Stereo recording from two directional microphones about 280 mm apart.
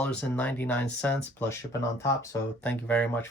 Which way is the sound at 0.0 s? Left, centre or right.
Centre.